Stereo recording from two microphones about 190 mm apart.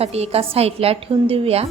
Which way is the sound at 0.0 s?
35° right (ahead or behind).